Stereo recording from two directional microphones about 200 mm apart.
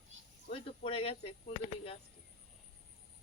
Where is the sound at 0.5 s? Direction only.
30° left (ahead or behind).